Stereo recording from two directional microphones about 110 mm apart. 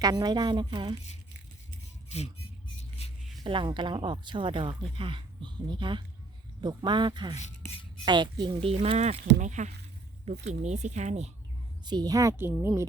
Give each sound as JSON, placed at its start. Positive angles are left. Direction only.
{"t": 0.0, "sound": "a woman's voice", "side_deg": -35}
{"t": 2.0, "sound": "a sound", "side_deg": 80}
{"t": 3.4, "sound": "a woman's voice", "side_deg": -50}
{"t": 8.8, "sound": "speech", "side_deg": -75}
{"t": 11.9, "sound": "speech", "side_deg": -40}